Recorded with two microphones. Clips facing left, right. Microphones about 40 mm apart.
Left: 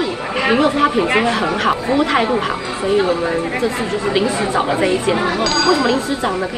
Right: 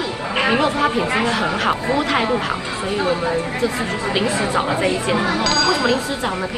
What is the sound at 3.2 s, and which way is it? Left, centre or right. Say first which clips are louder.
Speech: left 2 dB; left.